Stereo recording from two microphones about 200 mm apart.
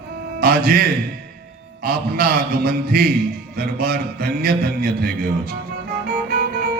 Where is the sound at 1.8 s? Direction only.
50° right (ahead or behind).